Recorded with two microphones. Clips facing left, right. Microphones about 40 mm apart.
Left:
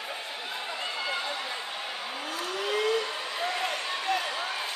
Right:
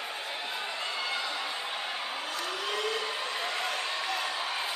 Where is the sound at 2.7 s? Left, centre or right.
Centre.